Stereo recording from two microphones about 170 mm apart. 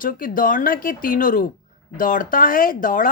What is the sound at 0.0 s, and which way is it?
A woman's voice, 55° left (ahead or behind).